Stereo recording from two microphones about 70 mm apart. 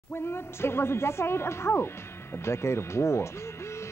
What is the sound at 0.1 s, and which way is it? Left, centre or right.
Speech, left.